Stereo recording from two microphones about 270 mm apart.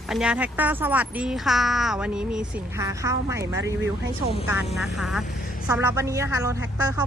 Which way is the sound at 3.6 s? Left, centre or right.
Right.